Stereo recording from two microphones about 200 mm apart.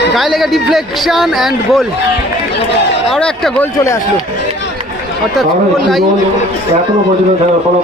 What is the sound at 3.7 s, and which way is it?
Speech, 15° left (ahead or behind).